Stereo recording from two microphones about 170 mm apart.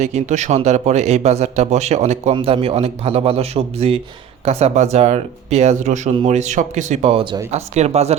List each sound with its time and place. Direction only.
0.0 s a man's voice: 45° right (ahead or behind)